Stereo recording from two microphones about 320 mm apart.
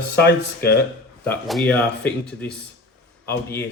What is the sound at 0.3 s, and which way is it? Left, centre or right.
Speech, left.